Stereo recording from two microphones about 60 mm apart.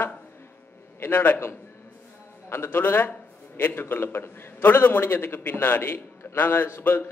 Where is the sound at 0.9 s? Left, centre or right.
Left.